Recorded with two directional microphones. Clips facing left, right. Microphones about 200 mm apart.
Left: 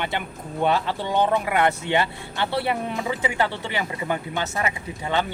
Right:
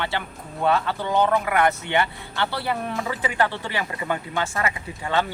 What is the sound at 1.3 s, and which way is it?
Speech, 20° left (ahead or behind).